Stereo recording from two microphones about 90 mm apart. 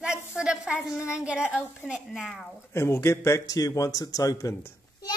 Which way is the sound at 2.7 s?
30° left (ahead or behind).